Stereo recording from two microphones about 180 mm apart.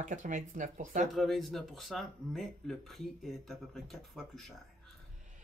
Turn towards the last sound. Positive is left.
turn(degrees=0)  # may be behind; listen again after turning